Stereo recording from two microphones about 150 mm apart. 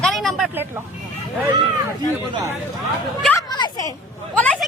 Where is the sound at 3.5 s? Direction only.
25° left (ahead or behind).